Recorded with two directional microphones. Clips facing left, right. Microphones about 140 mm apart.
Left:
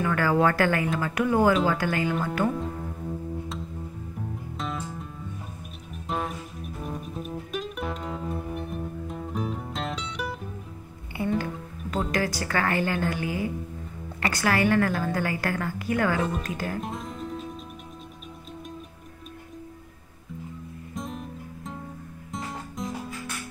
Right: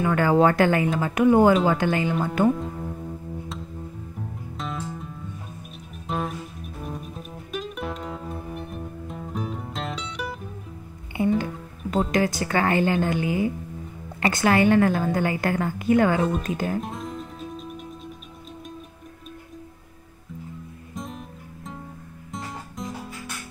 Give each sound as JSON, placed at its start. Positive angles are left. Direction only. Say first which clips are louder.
{"t": 0.0, "sound": "a woman's voice", "louder": "right 4 dB", "side_deg": -20}
{"t": 4.6, "sound": "music", "louder": "right 2 dB", "side_deg": 0}
{"t": 11.1, "sound": "music", "louder": "right 6 dB", "side_deg": -20}
{"t": 12.1, "sound": "a woman's voice", "louder": "right 4 dB", "side_deg": -20}
{"t": 16.8, "sound": "music", "louder": "right 1 dB", "side_deg": 0}
{"t": 20.9, "sound": "music", "louder": "left 1 dB", "side_deg": 0}